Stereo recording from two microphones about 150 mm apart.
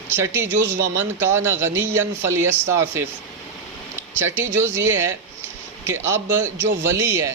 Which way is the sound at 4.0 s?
15° right (ahead or behind).